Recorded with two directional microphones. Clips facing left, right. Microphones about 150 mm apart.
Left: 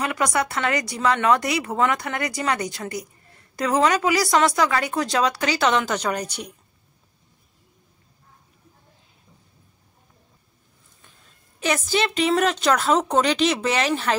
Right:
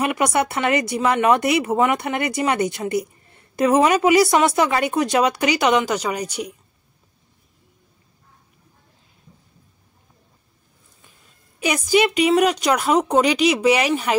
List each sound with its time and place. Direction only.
0.0 s speech: 20° right (ahead or behind)
11.6 s a woman's voice: 10° right (ahead or behind)